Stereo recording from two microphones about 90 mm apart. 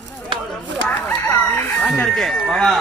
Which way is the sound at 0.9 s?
20° left (ahead or behind).